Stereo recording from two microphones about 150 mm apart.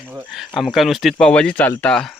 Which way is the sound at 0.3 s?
Centre (ahead or behind).